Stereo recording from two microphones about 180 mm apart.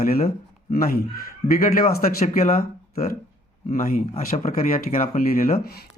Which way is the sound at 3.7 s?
50° left (ahead or behind).